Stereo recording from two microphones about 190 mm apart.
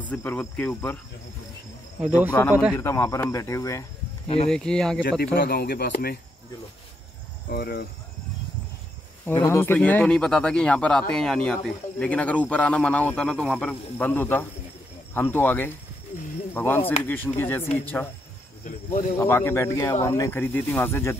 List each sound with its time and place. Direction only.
0.1 s a man's voice: 10° left (ahead or behind)
2.4 s a man's voice: 15° left (ahead or behind)
4.5 s speech: 5° left (ahead or behind)
5.2 s speech: 60° left (ahead or behind)
7.4 s speech: 55° left (ahead or behind)
9.3 s a man's voice: 15° left (ahead or behind)
18.6 s speech: 45° left (ahead or behind)
19.1 s a man's voice: 10° left (ahead or behind)